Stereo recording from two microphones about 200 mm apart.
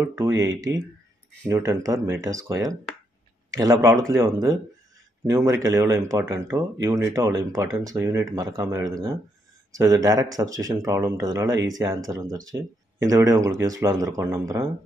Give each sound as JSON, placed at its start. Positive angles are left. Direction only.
{"t": 0.2, "sound": "a man's voice", "side_deg": -15}